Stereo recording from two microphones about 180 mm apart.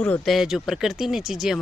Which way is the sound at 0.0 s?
5° left (ahead or behind).